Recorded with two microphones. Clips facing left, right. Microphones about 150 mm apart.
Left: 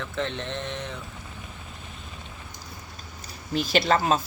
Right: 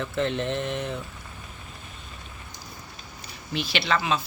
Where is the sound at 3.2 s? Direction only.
40° left (ahead or behind).